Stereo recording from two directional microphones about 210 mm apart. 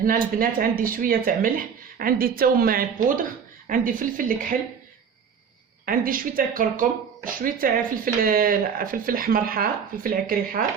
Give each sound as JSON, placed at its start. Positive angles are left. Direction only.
{"t": 0.0, "sound": "a woman's voice", "side_deg": -40}
{"t": 5.8, "sound": "speech", "side_deg": -45}